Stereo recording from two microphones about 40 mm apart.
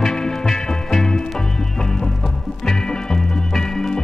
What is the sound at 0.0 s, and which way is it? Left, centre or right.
Music, centre.